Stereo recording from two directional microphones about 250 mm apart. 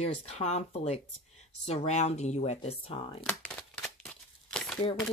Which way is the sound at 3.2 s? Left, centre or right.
Centre.